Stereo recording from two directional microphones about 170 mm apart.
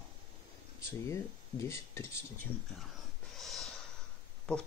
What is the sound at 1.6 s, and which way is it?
Speech, 15° left (ahead or behind).